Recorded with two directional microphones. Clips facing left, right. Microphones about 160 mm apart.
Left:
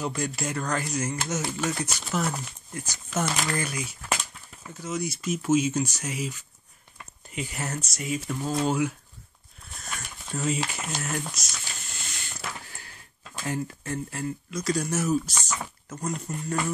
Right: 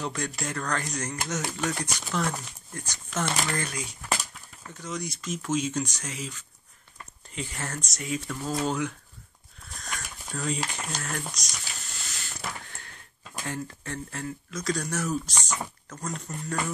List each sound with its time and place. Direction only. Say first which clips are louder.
0.0 s speech: left 2 dB; 5° left (ahead or behind)
9.8 s a sound: right 1 dB; 5° left (ahead or behind)
10.3 s speech: left 3 dB; 20° left (ahead or behind)
10.7 s speech: left 2 dB; 5° left (ahead or behind)
12.1 s a sound: even; 5° left (ahead or behind)
13.5 s speech: left 4 dB; 5° left (ahead or behind)